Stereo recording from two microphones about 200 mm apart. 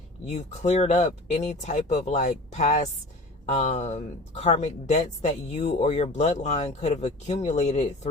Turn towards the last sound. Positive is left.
turn(degrees=35)  # may be behind; listen again after turning